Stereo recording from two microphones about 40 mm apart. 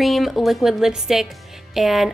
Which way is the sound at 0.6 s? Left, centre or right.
Centre.